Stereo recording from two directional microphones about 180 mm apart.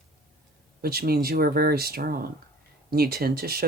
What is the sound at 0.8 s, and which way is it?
Speech, 55° right (ahead or behind).